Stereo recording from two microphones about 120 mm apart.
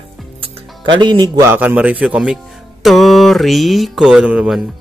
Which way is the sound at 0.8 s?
40° right (ahead or behind).